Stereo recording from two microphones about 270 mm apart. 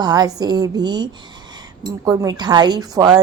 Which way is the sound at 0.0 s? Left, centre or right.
Centre.